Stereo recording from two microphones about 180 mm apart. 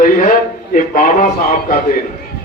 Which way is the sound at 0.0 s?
45° left (ahead or behind).